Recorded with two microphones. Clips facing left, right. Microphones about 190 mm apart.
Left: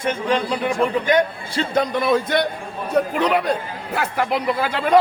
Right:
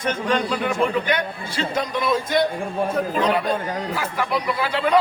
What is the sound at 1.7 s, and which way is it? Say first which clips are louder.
A man's voice: left 4 dB; 60° left (ahead or behind).